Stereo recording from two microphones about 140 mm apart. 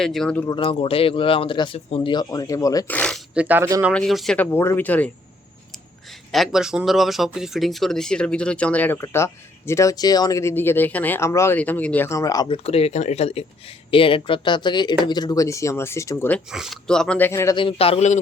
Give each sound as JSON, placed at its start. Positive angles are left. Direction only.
{"t": 0.0, "sound": "speech", "side_deg": 5}
{"t": 0.5, "sound": "speech", "side_deg": 40}
{"t": 2.9, "sound": "speech", "side_deg": 5}
{"t": 3.3, "sound": "speech", "side_deg": -10}
{"t": 3.9, "sound": "speech", "side_deg": 0}
{"t": 4.4, "sound": "speech", "side_deg": 15}
{"t": 6.1, "sound": "speech", "side_deg": 0}
{"t": 12.5, "sound": "speech", "side_deg": 45}
{"t": 16.5, "sound": "speech", "side_deg": 0}
{"t": 17.6, "sound": "a man's voice", "side_deg": 40}